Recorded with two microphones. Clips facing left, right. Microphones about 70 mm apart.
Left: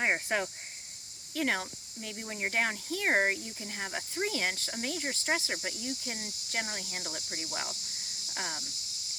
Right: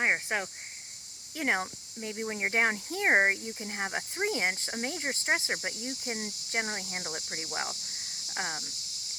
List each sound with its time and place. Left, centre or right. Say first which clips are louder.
0.0 s speech: right 1 dB; centre
2.0 s cricket: right 4 dB; right